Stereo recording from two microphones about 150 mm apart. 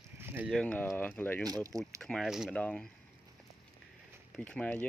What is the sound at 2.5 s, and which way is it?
Speech, 10° left (ahead or behind).